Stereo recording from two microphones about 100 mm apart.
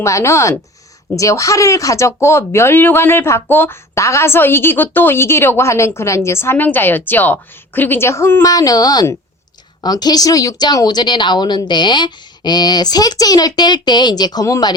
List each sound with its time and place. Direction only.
0.0 s a woman's voice: 30° left (ahead or behind)